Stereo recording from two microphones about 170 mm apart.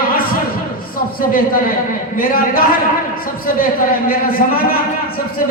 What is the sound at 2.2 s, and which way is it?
Speech, 55° left (ahead or behind).